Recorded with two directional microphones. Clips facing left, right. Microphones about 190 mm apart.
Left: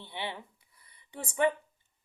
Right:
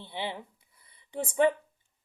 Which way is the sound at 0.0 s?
25° right (ahead or behind).